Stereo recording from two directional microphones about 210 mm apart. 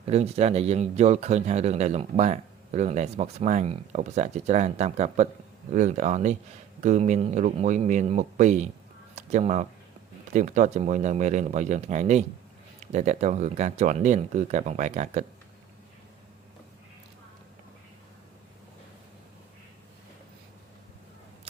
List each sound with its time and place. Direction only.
0.1 s speech: 30° right (ahead or behind)